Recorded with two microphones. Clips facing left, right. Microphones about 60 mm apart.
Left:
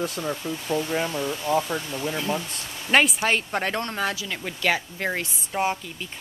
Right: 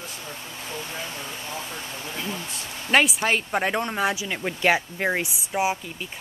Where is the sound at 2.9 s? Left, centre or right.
Centre.